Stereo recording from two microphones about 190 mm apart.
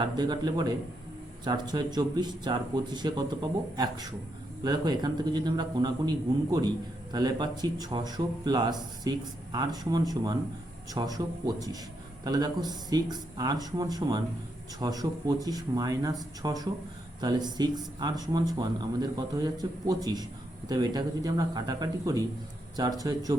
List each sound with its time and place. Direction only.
0.0 s a man's voice: 20° right (ahead or behind)